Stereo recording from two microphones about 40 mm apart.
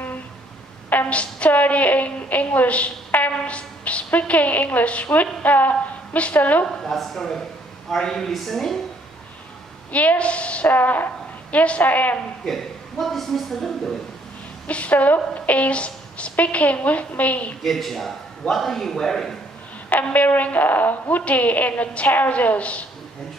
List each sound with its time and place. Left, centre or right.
1.1 s a woman's voice: left
3.1 s a sound: left
4.2 s a woman's voice: left
4.8 s a woman's voice: left
5.1 s a woman's voice: left
6.8 s a man's voice: centre
9.9 s a woman's voice: left
10.7 s a woman's voice: left
11.5 s a woman's voice: left
11.8 s a woman's voice: left
12.4 s a man's voice: centre
14.7 s a woman's voice: left
17.6 s a man's voice: centre
19.9 s a woman's voice: left